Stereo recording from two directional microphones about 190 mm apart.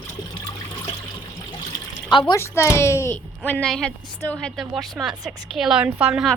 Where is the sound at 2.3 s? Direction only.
15° left (ahead or behind); by 6.4 s 5° right (ahead or behind).